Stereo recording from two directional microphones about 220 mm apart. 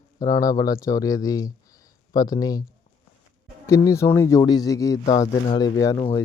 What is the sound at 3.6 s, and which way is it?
Speech, 15° left (ahead or behind).